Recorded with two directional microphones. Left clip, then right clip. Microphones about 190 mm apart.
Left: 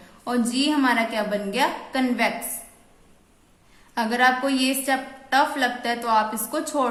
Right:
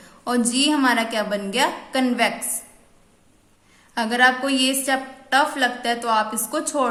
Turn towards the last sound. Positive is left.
turn(degrees=-10)  # may be behind; listen again after turning